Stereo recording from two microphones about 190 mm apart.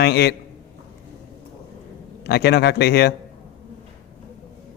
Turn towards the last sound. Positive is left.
turn(degrees=60)  # may be behind; listen again after turning